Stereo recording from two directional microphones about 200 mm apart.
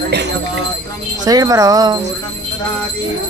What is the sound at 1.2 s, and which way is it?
Speech, 20° right (ahead or behind).